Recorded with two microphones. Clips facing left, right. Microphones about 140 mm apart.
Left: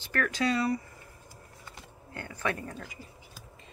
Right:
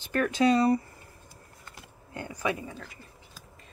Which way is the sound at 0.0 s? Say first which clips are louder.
Right 5 dB; 20° right (ahead or behind).